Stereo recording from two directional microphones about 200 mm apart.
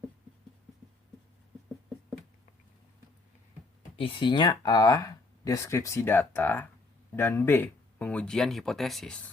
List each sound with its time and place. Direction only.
3.9 s speech: 25° left (ahead or behind); by 9.1 s centre (ahead or behind)